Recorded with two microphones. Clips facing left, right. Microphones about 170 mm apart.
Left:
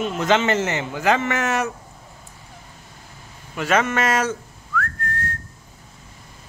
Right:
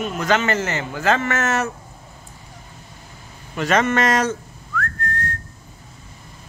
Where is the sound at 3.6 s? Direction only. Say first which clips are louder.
Right 2 dB; 5° left (ahead or behind).